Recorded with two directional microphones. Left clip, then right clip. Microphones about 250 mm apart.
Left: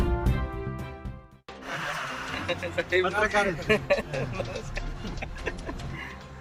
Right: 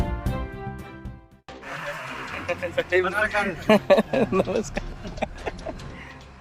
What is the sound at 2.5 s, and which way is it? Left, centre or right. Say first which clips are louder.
Speech: right 4 dB; right.